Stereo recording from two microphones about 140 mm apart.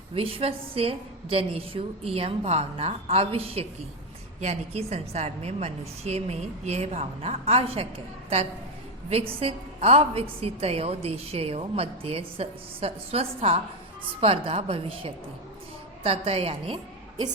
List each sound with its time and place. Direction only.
0.1 s a woman's voice: 40° right (ahead or behind)
9.0 s a woman's voice: 45° right (ahead or behind)